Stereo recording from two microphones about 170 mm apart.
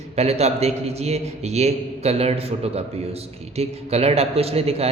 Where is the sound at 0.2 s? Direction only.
40° right (ahead or behind).